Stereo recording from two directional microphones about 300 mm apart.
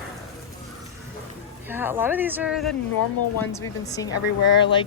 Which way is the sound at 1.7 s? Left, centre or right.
Centre.